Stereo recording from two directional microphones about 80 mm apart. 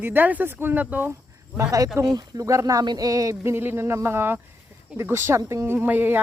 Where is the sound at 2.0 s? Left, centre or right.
Right.